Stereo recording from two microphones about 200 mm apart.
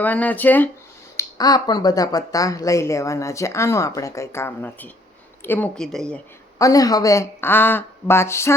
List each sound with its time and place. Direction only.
0.0 s speech: 10° left (ahead or behind)
1.1 s speech: 20° left (ahead or behind); by 6.1 s 5° left (ahead or behind)
6.6 s speech: 15° left (ahead or behind)